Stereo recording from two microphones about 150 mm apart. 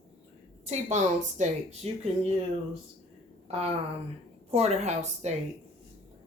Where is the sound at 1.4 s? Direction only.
50° right (ahead or behind).